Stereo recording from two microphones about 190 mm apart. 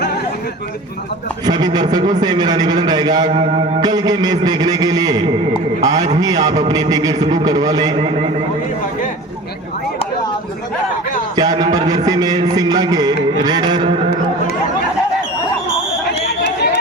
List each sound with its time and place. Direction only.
1.5 s a man's voice: 20° right (ahead or behind)
11.3 s a man's voice: 20° right (ahead or behind)
16.2 s a sound: 60° left (ahead or behind)